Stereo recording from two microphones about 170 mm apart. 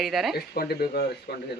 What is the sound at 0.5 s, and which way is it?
Speech, 65° left (ahead or behind).